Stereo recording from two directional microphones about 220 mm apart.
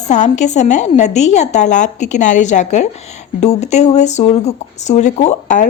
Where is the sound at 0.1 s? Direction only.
30° left (ahead or behind).